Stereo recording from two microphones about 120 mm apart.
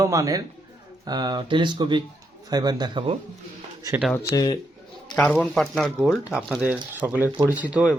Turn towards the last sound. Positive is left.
turn(degrees=-10)  # may be behind; listen again after turning